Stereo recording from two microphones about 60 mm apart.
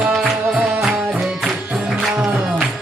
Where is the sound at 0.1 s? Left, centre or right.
Centre.